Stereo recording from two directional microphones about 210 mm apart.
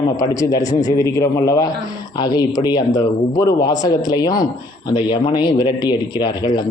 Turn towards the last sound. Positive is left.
turn(degrees=20)  # may be behind; listen again after turning